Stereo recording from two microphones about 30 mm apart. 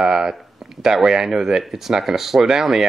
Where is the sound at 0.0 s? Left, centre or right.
Right.